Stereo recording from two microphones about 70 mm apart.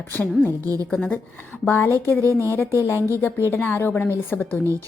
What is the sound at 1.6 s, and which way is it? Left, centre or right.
Speech, left.